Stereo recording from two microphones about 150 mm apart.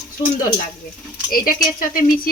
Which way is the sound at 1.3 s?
70° left (ahead or behind).